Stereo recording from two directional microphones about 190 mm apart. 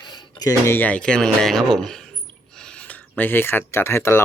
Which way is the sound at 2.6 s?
5° left (ahead or behind).